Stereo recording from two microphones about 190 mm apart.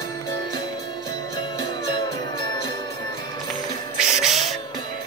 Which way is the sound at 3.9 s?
5° right (ahead or behind).